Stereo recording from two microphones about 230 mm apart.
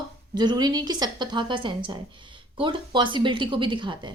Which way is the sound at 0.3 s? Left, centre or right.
Centre.